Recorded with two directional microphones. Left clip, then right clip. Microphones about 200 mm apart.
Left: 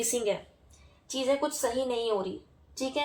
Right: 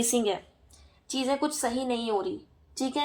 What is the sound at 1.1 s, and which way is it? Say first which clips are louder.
Speech: even; 50° right (ahead or behind).